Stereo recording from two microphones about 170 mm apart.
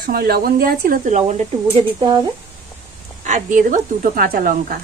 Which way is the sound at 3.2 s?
50° right (ahead or behind).